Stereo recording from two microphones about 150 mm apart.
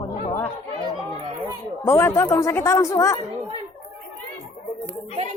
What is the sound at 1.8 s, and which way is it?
A man's voice, 20° left (ahead or behind).